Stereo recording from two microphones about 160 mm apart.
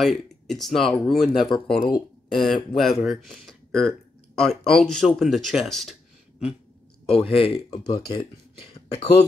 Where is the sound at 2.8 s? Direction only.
Centre (ahead or behind).